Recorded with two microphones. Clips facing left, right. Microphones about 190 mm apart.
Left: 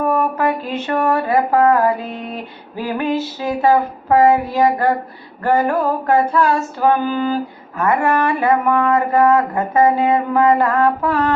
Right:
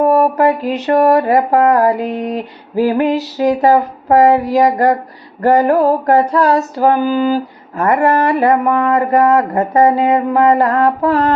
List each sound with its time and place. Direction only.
0.0 s female singing: 35° right (ahead or behind)